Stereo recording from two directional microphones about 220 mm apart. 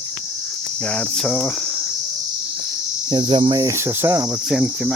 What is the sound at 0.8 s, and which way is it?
Cricket, 5° left (ahead or behind).